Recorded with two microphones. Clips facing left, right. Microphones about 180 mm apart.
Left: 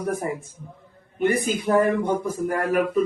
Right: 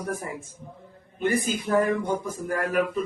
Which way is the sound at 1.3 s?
60° left (ahead or behind).